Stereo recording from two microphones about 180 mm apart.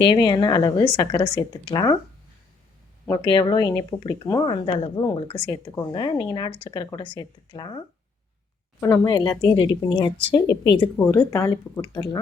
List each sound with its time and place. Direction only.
0.0 s speech: 25° left (ahead or behind)
3.2 s speech: 25° left (ahead or behind)
11.1 s speech: 15° left (ahead or behind)